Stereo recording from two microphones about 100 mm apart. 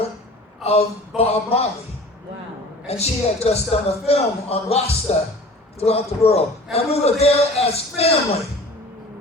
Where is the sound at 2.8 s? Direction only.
90° left.